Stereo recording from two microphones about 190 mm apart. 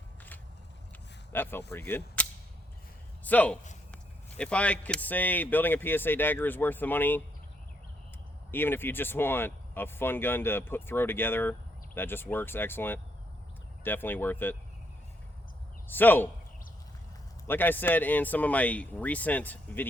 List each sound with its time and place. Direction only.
1.3 s speech: 10° left (ahead or behind)
3.2 s speech: 10° left (ahead or behind)
8.4 s speech: 10° left (ahead or behind)
15.9 s speech: 10° left (ahead or behind)
17.4 s speech: 10° left (ahead or behind)